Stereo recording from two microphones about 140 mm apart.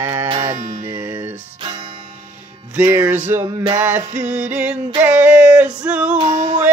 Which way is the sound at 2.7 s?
15° right (ahead or behind).